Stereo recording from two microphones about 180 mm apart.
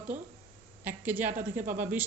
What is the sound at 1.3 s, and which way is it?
Speech, 45° right (ahead or behind).